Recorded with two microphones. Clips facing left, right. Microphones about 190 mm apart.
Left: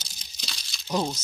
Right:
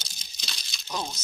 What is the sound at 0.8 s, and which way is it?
Speech, 30° left (ahead or behind).